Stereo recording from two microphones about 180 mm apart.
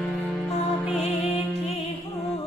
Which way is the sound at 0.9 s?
35° left (ahead or behind).